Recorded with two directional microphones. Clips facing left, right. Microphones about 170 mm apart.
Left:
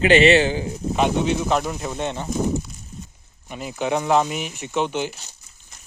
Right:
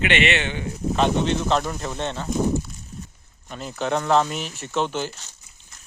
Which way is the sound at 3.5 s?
10° left (ahead or behind).